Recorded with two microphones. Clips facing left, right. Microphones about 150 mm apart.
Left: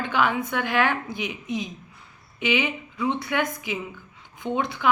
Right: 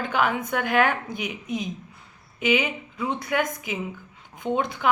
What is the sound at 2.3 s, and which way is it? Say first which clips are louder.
A woman's voice: right 1 dB; 45° right (ahead or behind).